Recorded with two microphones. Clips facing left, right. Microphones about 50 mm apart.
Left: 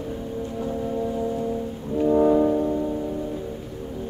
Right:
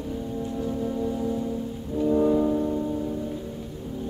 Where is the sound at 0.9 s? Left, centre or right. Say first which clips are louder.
Left 2 dB; centre.